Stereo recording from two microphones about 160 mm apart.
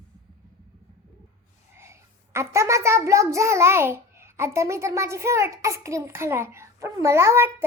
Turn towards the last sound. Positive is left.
turn(degrees=-15)  # may be behind; listen again after turning